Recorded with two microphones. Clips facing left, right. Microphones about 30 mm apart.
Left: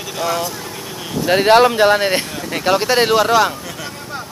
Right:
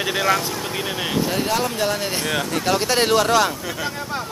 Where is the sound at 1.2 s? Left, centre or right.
Left.